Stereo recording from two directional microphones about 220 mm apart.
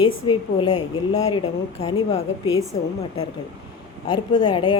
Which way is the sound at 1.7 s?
30° left (ahead or behind).